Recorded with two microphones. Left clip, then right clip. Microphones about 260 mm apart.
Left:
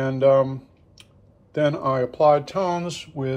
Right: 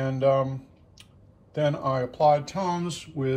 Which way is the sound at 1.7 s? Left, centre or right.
Left.